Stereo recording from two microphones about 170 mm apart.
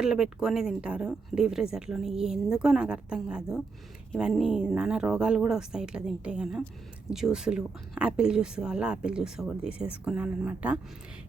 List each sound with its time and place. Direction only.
0.0 s speech: 5° right (ahead or behind)